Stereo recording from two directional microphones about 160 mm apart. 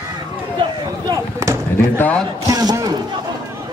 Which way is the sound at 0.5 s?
25° right (ahead or behind).